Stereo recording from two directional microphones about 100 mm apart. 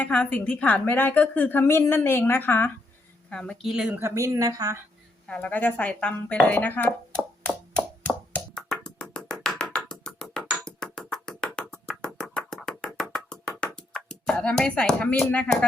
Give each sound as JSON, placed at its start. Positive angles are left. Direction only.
{"t": 0.0, "sound": "a woman's voice", "side_deg": 15}
{"t": 3.6, "sound": "speech", "side_deg": -5}
{"t": 3.8, "sound": "speech", "side_deg": -20}
{"t": 4.1, "sound": "a woman's voice", "side_deg": -30}
{"t": 5.3, "sound": "speech", "side_deg": 15}
{"t": 7.4, "sound": "music", "side_deg": 15}
{"t": 11.7, "sound": "a sound", "side_deg": 5}